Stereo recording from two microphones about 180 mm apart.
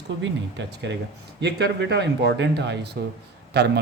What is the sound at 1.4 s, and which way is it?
Speech, 70° right (ahead or behind).